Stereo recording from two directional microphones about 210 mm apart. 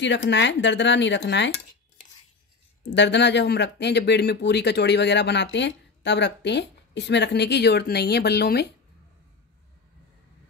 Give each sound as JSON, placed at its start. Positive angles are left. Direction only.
{"t": 0.0, "sound": "speech", "side_deg": 60}
{"t": 2.8, "sound": "speech", "side_deg": 55}